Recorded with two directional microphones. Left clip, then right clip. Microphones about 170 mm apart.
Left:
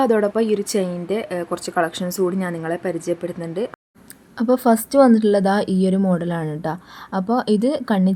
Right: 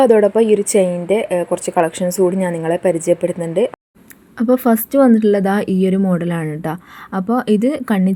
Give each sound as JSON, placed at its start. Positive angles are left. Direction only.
{"t": 0.0, "sound": "a woman's voice", "side_deg": 0}